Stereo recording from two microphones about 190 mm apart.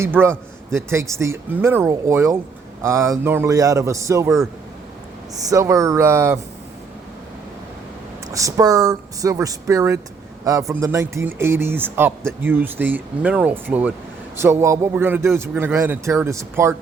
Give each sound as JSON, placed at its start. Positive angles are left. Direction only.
{"t": 0.0, "sound": "speech", "side_deg": -10}
{"t": 5.5, "sound": "speech", "side_deg": -15}
{"t": 8.3, "sound": "speech", "side_deg": -15}